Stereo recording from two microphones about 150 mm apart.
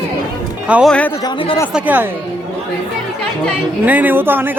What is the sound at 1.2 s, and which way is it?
Speech, 35° left (ahead or behind).